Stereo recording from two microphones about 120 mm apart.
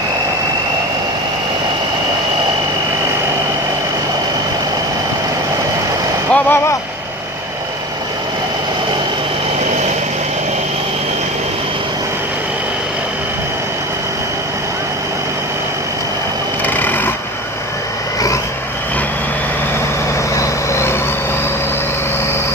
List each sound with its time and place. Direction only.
6.3 s speech: 20° left (ahead or behind)
16.6 s a sound: 15° left (ahead or behind)
20.3 s vehicle: 25° left (ahead or behind)